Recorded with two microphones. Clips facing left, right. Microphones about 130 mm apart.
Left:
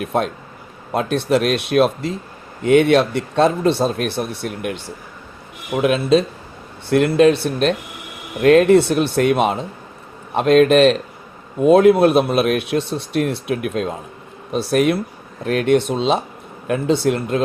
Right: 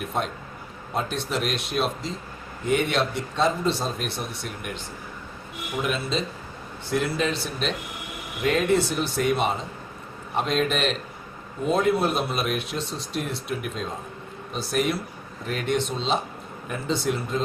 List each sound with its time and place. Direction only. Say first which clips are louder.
0.9 s speech: left 10 dB; 65° left (ahead or behind)
5.8 s speech: left 12 dB; 75° left (ahead or behind)
8.4 s speech: left 11 dB; 75° left (ahead or behind)